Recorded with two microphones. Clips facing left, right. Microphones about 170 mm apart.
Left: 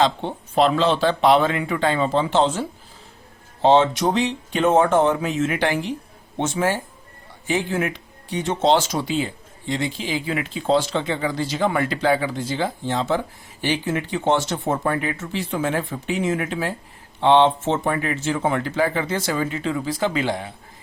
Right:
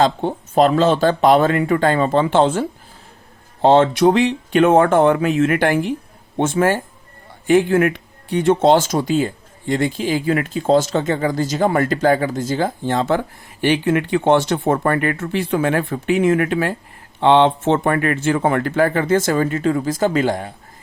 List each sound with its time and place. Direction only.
0.0 s speech: 45° right (ahead or behind)